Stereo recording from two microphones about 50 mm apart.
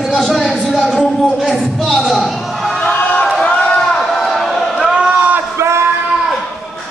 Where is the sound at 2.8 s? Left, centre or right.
Left.